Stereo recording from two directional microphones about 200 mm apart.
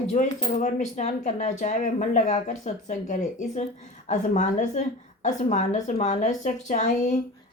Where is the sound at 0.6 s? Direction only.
35° left (ahead or behind).